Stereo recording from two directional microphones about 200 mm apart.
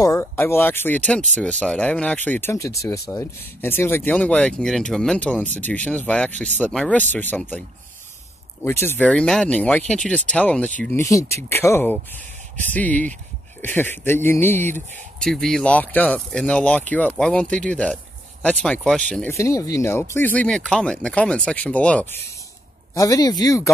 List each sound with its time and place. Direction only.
0.0 s speech: 10° left (ahead or behind)
8.6 s speech: 10° left (ahead or behind)
22.9 s speech: 15° left (ahead or behind)